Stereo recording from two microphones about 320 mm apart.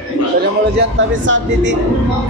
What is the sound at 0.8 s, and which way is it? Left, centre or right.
Speech, right.